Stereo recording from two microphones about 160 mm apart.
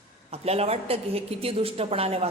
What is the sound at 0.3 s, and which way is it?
A woman's voice, 40° right (ahead or behind).